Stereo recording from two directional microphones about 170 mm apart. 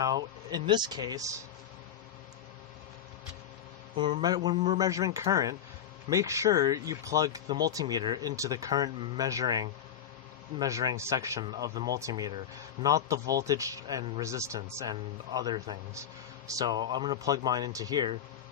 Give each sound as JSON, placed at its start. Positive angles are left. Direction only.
{"t": 0.0, "sound": "speech", "side_deg": -25}
{"t": 3.9, "sound": "speech", "side_deg": -30}